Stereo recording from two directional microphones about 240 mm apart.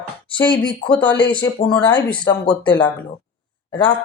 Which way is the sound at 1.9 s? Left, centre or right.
Centre.